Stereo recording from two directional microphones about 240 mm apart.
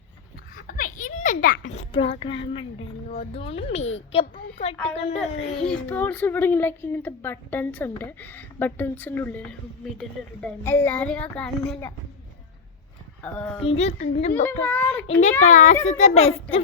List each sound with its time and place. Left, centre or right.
0.5 s a sound: left
1.7 s a child's voice: left
3.8 s a child's voice: left
4.1 s a child's voice: left
5.2 s a child's voice: centre
13.2 s speech: centre
13.7 s a child's voice: left
14.6 s a child's voice: centre
15.2 s a child's voice: left